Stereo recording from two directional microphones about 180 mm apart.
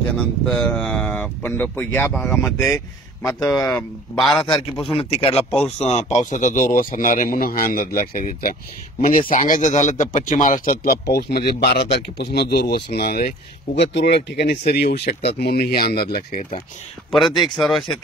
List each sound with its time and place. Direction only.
0.5 s speech: 5° left (ahead or behind)
2.7 s speech: 15° left (ahead or behind)
4.2 s speech: centre (ahead or behind)
4.5 s a man's voice: 25° left (ahead or behind); by 8.5 s 55° left (ahead or behind)
9.0 s speech: 35° left (ahead or behind)
9.3 s speech: 45° left (ahead or behind)
13.7 s speech: 70° left (ahead or behind)
17.1 s speech: centre (ahead or behind)